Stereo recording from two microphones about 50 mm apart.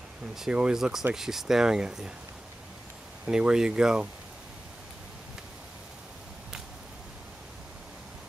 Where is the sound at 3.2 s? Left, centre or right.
Centre.